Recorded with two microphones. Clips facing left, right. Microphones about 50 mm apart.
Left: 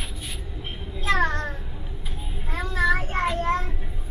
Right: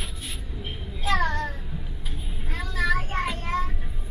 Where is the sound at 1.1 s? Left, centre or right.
Left.